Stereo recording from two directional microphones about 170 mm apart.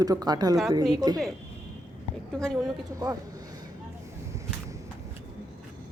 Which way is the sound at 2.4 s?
5° left (ahead or behind).